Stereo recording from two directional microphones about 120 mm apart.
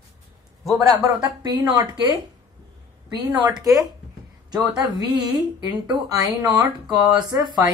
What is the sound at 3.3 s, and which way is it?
Speech, 35° right (ahead or behind).